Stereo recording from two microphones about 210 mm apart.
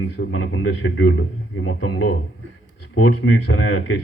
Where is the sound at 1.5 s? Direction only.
70° left (ahead or behind).